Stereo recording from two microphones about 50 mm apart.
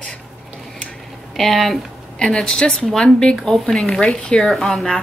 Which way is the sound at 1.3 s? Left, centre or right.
Centre.